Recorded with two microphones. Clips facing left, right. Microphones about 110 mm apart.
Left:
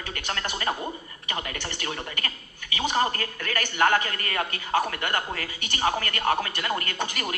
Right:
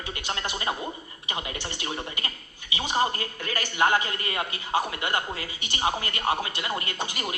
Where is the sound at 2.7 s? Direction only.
15° right (ahead or behind).